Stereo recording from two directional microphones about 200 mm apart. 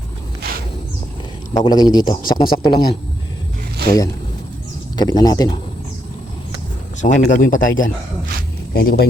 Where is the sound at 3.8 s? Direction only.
20° left (ahead or behind).